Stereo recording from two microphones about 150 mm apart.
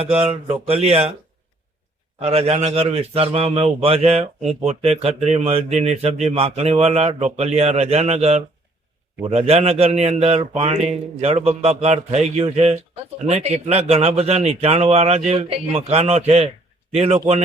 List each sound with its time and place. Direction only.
0.0 s speech: 40° right (ahead or behind)
2.2 s speech: 45° right (ahead or behind)